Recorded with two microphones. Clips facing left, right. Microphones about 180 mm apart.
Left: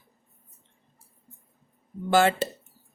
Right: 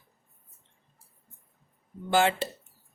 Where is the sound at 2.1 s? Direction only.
40° left (ahead or behind).